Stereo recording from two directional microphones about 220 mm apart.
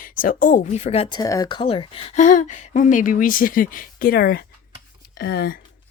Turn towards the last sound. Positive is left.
turn(degrees=45)  # may be behind; listen again after turning